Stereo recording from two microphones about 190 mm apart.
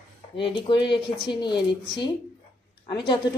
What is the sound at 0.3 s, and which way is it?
A woman's voice, 25° left (ahead or behind).